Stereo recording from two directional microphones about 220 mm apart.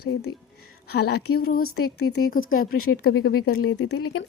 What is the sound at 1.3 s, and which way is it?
Speech, 45° left (ahead or behind).